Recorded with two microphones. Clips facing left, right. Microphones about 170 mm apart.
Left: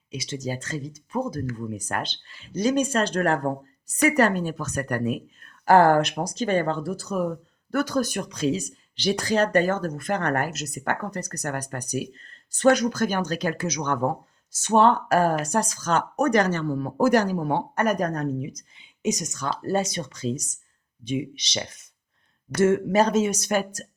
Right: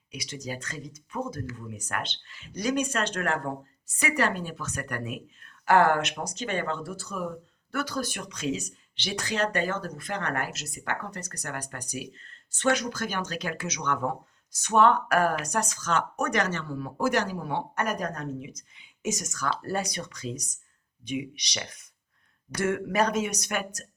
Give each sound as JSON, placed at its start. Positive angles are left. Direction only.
{"t": 0.1, "sound": "speech", "side_deg": 25}
{"t": 18.8, "sound": "speech", "side_deg": 20}